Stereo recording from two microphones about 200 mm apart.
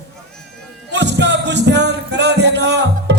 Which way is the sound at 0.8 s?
60° right (ahead or behind).